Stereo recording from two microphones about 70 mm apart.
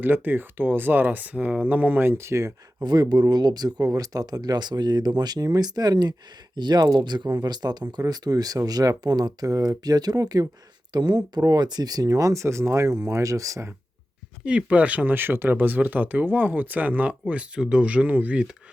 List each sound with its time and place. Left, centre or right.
0.0 s speech: right
2.8 s speech: right
8.0 s speech: right
10.9 s speech: right
14.4 s speech: centre